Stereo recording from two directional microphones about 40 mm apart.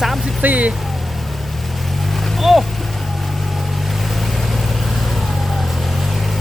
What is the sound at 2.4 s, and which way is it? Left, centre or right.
Vehicle, centre.